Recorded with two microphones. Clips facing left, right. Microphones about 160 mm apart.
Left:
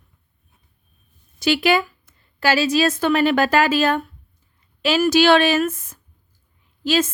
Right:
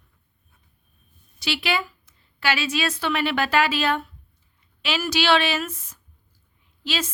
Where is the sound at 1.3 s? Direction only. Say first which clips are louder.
Left 8 dB; 45° left (ahead or behind).